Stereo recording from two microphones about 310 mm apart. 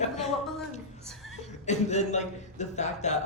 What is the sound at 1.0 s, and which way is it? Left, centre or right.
Chuckle, centre.